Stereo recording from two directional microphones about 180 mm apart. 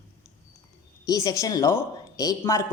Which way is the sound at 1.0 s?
20° left (ahead or behind).